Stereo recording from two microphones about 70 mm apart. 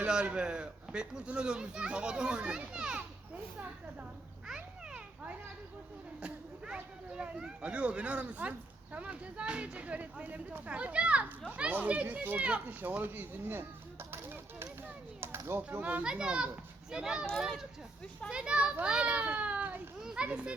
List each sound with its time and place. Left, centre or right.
0.0 s a child's voice: centre
4.4 s children playing: centre
6.1 s speech: centre; by 15.8 s right
15.8 s speech: right
16.0 s a child's voice: centre
18.3 s speech: centre
20.0 s a child's voice: centre